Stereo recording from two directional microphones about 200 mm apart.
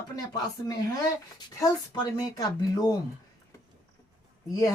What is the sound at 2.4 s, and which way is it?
Speech, 20° left (ahead or behind).